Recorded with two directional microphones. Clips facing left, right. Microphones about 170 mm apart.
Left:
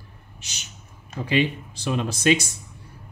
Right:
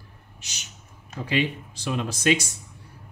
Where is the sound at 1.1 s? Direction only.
25° left (ahead or behind).